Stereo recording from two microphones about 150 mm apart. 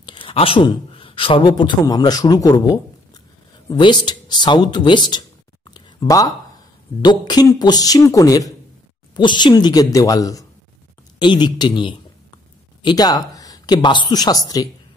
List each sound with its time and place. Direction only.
0.0 s a man's voice: 35° left (ahead or behind)
5.7 s a sound: 25° left (ahead or behind)
7.0 s speech: 30° left (ahead or behind)